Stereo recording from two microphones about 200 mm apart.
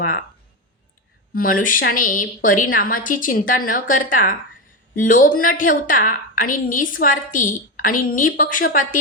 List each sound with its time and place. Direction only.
1.3 s a woman's voice: 45° left (ahead or behind)